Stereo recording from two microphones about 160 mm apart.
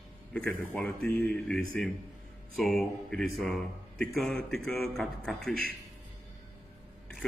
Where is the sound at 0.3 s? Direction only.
10° left (ahead or behind).